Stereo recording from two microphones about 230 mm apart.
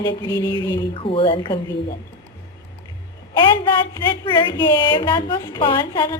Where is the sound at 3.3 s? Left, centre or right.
Left.